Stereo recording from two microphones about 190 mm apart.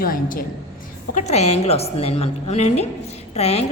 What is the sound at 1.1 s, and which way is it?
A woman's voice, 35° left (ahead or behind).